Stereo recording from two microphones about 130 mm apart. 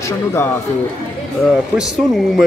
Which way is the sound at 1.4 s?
Centre (ahead or behind).